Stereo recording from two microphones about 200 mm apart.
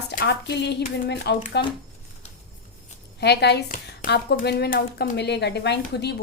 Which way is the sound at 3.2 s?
55° left (ahead or behind).